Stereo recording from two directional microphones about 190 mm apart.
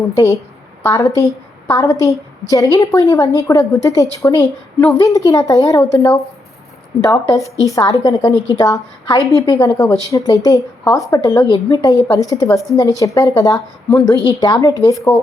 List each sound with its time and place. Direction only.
0.8 s a woman's voice: 15° left (ahead or behind)
8.3 s a woman's voice: 20° right (ahead or behind)
8.5 s a woman's voice: 20° left (ahead or behind)